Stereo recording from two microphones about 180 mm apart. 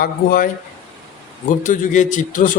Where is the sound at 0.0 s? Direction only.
55° left (ahead or behind).